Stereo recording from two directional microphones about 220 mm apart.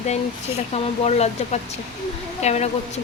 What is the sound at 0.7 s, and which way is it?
Speech, 30° left (ahead or behind).